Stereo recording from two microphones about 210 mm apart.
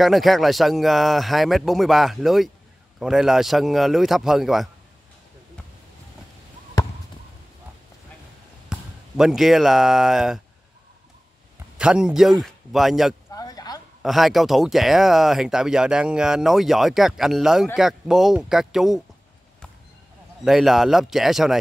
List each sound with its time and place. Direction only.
0.0 s speech: centre (ahead or behind)
8.6 s speech: centre (ahead or behind)
11.8 s speech: 5° right (ahead or behind)
13.3 s a sound: 15° left (ahead or behind)
14.0 s speech: centre (ahead or behind)
20.4 s speech: centre (ahead or behind)